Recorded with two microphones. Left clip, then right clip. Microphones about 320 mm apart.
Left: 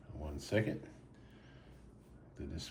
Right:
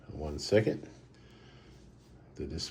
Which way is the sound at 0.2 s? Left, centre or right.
Centre.